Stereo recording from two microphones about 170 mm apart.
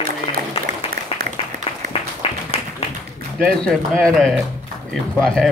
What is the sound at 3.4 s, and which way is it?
Speech, 5° left (ahead or behind).